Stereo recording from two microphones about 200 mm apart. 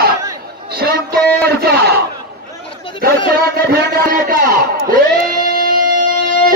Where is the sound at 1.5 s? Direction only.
50° right (ahead or behind).